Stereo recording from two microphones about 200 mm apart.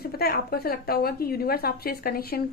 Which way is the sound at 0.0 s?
50° left (ahead or behind).